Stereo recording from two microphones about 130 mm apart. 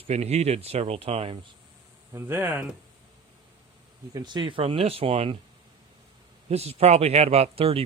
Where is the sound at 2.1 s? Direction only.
15° right (ahead or behind).